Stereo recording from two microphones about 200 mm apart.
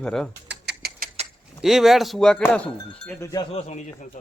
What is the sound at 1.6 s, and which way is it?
Speech, centre (ahead or behind).